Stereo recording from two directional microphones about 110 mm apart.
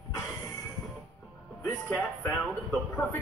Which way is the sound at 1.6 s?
15° left (ahead or behind).